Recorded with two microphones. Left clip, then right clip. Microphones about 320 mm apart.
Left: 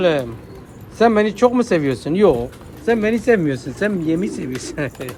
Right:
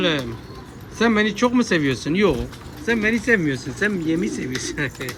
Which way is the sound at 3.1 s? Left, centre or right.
Left.